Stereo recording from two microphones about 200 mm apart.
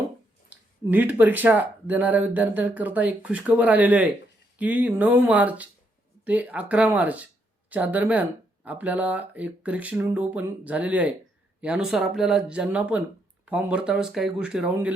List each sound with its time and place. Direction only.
0.5 s speech: 10° right (ahead or behind)